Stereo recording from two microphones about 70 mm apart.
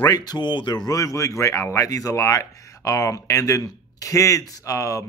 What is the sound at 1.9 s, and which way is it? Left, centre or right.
Speech, left.